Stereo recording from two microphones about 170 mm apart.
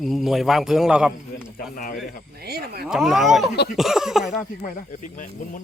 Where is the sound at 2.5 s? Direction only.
65° right (ahead or behind).